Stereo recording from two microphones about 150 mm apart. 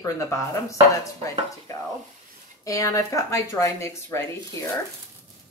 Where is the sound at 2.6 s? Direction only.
20° left (ahead or behind).